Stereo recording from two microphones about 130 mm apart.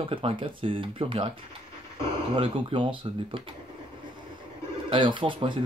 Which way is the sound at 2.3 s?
40° right (ahead or behind).